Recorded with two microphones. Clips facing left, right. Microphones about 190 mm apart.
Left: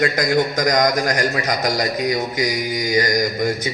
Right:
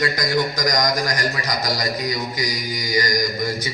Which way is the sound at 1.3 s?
50° left (ahead or behind).